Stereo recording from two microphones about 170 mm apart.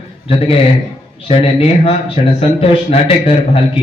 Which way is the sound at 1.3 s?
35° left (ahead or behind).